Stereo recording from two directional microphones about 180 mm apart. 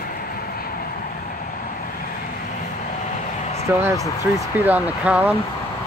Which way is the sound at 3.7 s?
10° right (ahead or behind).